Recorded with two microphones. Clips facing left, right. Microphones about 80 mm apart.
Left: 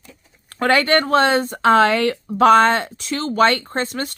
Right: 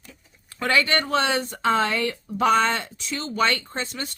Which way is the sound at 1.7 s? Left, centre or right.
Left.